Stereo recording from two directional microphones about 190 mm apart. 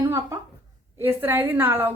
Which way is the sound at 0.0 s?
15° right (ahead or behind).